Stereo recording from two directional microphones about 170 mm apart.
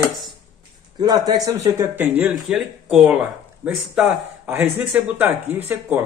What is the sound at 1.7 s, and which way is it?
Speech, 15° right (ahead or behind).